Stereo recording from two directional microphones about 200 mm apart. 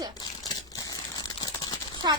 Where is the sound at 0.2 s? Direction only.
20° left (ahead or behind).